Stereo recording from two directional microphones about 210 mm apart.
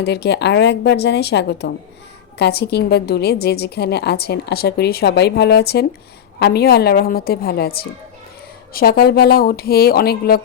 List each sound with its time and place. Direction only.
0.0 s a woman's voice: 50° left (ahead or behind)